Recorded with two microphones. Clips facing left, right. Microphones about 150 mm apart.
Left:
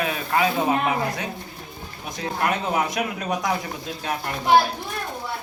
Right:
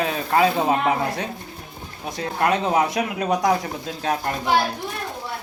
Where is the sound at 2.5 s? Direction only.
35° right (ahead or behind).